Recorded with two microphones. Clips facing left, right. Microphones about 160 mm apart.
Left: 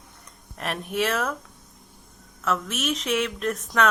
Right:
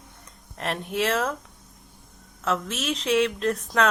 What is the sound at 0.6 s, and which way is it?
Speech, 25° right (ahead or behind).